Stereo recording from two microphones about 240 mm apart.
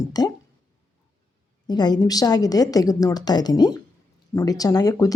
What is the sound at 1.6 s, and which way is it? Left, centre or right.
Speech, centre.